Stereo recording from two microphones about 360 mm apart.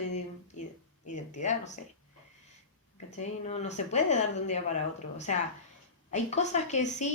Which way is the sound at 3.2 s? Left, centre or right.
Centre.